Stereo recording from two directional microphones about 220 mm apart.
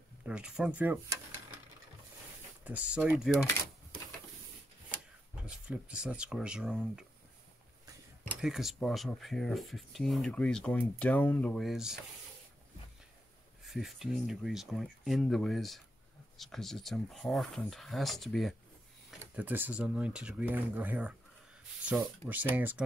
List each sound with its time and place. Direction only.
0.3 s speech: 5° right (ahead or behind)
2.6 s speech: 5° right (ahead or behind)
4.9 s speech: 5° right (ahead or behind)
8.4 s speech: centre (ahead or behind)
13.7 s speech: centre (ahead or behind)